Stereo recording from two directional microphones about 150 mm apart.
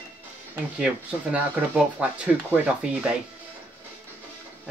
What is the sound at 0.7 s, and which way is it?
Speech, 10° right (ahead or behind).